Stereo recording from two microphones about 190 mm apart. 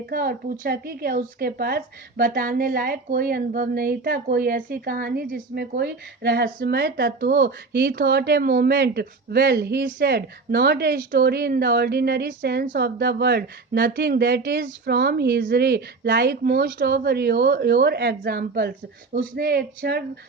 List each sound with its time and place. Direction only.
0.0 s speech: 50° right (ahead or behind)